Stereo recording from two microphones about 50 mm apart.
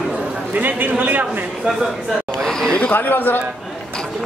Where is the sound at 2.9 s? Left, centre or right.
Left.